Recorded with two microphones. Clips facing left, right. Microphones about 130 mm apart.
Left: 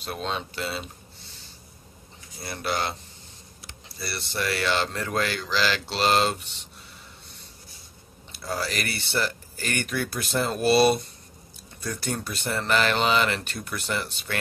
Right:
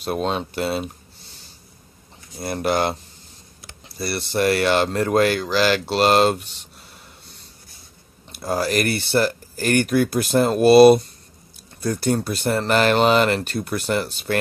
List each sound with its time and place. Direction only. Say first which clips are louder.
0.0 s speech: right 8 dB; 50° right (ahead or behind)
2.3 s speech: right 8 dB; 45° right (ahead or behind)
8.4 s speech: right 9 dB; 50° right (ahead or behind)
13.7 s speech: right 7 dB; 50° right (ahead or behind)
14.3 s speech: right 9 dB; 40° right (ahead or behind)